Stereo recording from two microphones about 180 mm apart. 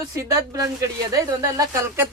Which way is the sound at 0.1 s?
15° right (ahead or behind).